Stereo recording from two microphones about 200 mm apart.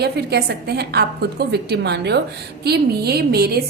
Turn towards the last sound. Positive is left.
turn(degrees=-50)  # may be behind; listen again after turning